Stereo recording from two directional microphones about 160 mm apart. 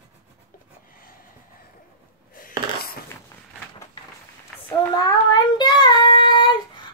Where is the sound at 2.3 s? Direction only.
60° left (ahead or behind).